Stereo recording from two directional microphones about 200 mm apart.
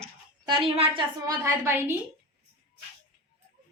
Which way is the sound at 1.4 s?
10° right (ahead or behind).